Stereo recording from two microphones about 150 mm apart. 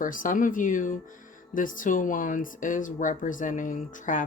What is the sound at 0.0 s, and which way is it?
Speech, 65° left (ahead or behind).